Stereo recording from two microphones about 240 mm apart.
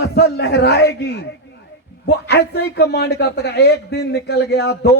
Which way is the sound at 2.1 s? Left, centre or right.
Left.